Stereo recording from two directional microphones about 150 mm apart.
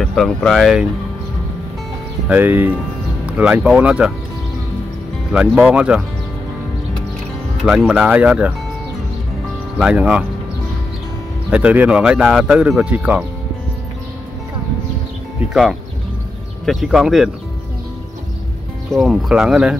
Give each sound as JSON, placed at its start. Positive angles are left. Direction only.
{"t": 0.0, "sound": "speech", "side_deg": 5}
{"t": 2.2, "sound": "speech", "side_deg": -10}
{"t": 5.3, "sound": "speech", "side_deg": -5}
{"t": 7.6, "sound": "speech", "side_deg": -5}
{"t": 9.8, "sound": "speech", "side_deg": -5}
{"t": 11.5, "sound": "speech", "side_deg": -10}
{"t": 16.6, "sound": "speech", "side_deg": -5}
{"t": 18.9, "sound": "speech", "side_deg": 0}